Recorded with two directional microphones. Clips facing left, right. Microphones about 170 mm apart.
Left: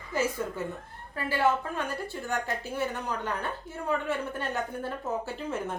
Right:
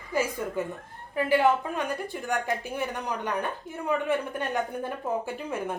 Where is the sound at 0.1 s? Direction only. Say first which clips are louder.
Right 2 dB; 15° right (ahead or behind).